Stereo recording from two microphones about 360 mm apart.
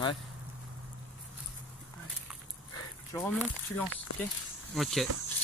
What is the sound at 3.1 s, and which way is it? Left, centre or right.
Speech, centre.